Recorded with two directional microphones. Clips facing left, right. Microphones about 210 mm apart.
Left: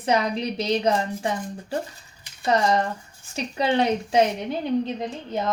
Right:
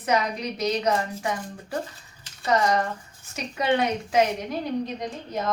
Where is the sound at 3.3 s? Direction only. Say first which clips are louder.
Left 1 dB; 30° left (ahead or behind).